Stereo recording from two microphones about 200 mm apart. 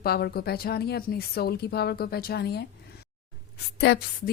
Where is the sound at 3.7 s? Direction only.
55° left (ahead or behind).